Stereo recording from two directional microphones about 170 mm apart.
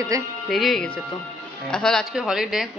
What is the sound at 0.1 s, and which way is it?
Speech, 20° right (ahead or behind).